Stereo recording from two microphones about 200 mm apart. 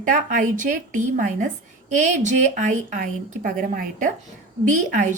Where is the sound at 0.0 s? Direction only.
40° right (ahead or behind).